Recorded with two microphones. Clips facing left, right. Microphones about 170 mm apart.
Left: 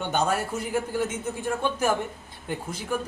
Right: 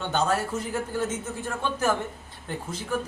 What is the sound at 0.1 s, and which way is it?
Speech, 10° left (ahead or behind).